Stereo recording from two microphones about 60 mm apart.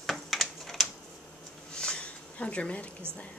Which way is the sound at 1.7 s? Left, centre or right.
Centre.